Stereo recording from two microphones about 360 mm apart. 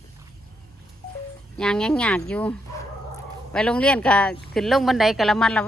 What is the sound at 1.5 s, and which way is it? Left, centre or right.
Speech, centre.